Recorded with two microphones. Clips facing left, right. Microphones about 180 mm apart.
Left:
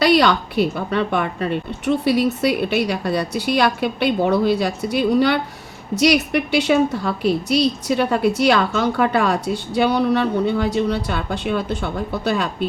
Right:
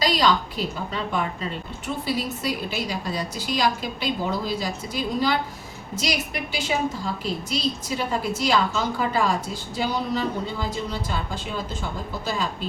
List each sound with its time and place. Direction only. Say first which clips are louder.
0.0 s a woman's voice: left 6 dB; 65° left (ahead or behind)